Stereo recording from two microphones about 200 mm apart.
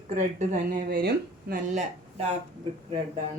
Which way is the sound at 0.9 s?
50° right (ahead or behind).